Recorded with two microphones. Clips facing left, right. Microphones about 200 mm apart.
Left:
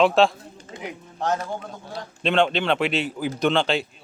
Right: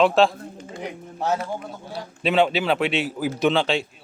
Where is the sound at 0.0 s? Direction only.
Centre (ahead or behind).